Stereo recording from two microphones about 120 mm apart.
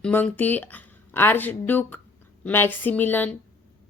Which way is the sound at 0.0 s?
10° left (ahead or behind).